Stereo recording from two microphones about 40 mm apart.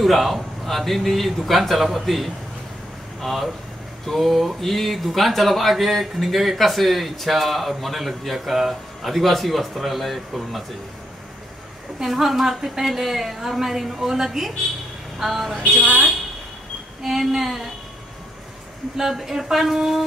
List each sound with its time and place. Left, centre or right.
0.0 s speech: centre
12.0 s a woman's voice: centre
15.8 s speech: right
17.0 s a woman's voice: centre
18.9 s a woman's voice: centre